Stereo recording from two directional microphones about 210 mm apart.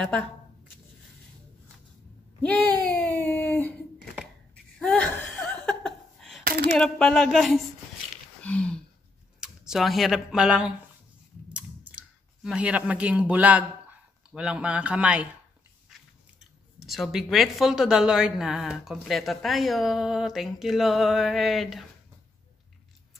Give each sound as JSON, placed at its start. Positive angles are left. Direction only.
{"t": 0.0, "sound": "speech", "side_deg": 5}
{"t": 2.4, "sound": "a sound", "side_deg": 5}
{"t": 4.7, "sound": "laughter", "side_deg": 5}
{"t": 6.4, "sound": "a sound", "side_deg": -50}
{"t": 6.8, "sound": "speech", "side_deg": 5}
{"t": 8.4, "sound": "a sound", "side_deg": 5}
{"t": 9.4, "sound": "speech", "side_deg": 0}
{"t": 11.4, "sound": "clicking", "side_deg": -5}
{"t": 12.4, "sound": "a man's voice", "side_deg": -5}